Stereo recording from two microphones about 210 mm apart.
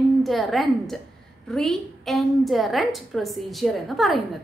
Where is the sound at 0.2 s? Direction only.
Centre (ahead or behind).